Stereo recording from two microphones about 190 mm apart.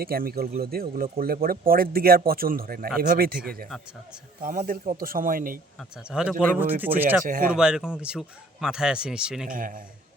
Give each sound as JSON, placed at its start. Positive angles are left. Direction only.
{"t": 0.0, "sound": "speech", "side_deg": -55}
{"t": 6.1, "sound": "speech", "side_deg": -5}
{"t": 7.3, "sound": "speech", "side_deg": -45}
{"t": 7.5, "sound": "speech", "side_deg": -5}
{"t": 9.5, "sound": "speech", "side_deg": -45}